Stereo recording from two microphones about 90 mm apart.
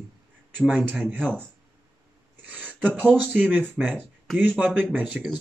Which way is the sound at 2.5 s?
20° right (ahead or behind).